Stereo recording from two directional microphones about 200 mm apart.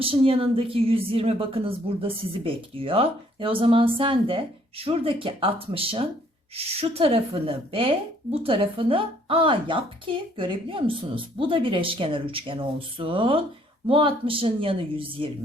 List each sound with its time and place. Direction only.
0.0 s a woman's voice: 30° right (ahead or behind)